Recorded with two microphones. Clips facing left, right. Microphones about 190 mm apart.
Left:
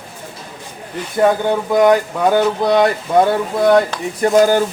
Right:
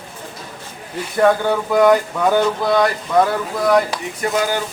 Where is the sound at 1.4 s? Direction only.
15° left (ahead or behind).